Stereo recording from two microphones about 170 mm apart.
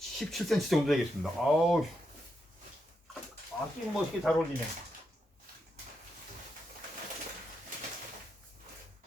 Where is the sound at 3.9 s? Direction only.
Centre (ahead or behind).